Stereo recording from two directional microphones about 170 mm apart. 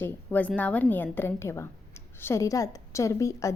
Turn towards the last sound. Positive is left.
turn(degrees=20)  # may be behind; listen again after turning